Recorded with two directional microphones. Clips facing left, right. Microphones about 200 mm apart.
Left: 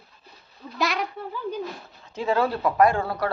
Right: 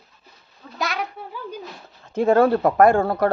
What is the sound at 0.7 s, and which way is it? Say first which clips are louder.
Speech: left 1 dB; centre (ahead or behind).